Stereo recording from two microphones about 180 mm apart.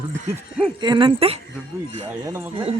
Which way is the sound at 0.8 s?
25° right (ahead or behind).